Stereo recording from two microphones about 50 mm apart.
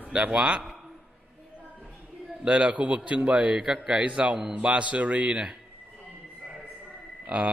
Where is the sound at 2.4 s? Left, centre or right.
Right.